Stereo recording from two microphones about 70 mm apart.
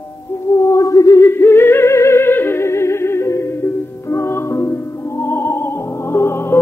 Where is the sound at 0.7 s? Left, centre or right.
Left.